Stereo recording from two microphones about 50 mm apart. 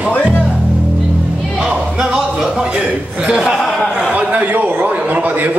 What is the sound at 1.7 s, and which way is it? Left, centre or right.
Music, centre.